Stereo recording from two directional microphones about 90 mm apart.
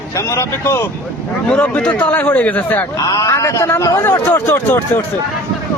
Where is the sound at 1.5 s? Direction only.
15° left (ahead or behind).